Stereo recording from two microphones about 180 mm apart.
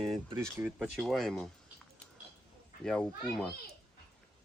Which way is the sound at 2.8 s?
5° left (ahead or behind).